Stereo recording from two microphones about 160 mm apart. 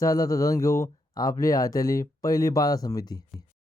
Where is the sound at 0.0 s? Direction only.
20° left (ahead or behind).